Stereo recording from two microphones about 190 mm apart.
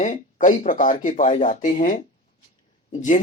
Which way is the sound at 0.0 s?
40° left (ahead or behind).